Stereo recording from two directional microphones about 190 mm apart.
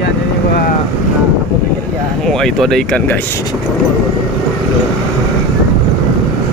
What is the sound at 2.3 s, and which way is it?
Speech, 5° left (ahead or behind).